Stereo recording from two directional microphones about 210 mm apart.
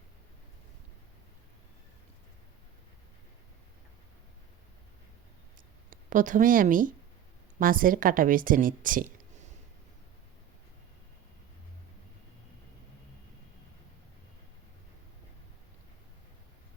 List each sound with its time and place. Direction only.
5.9 s a woman's voice: 40° right (ahead or behind)